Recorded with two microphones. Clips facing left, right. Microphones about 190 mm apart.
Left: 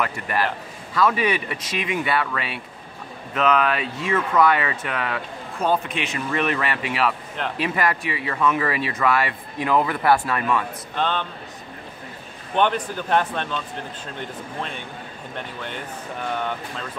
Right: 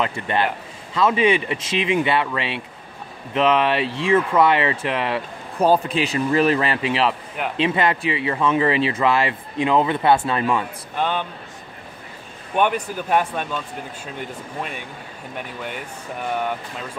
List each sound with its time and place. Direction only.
0.0 s speech: 25° right (ahead or behind)
11.0 s speech: 10° right (ahead or behind)
12.5 s speech: 10° right (ahead or behind)
14.6 s speech: 10° right (ahead or behind)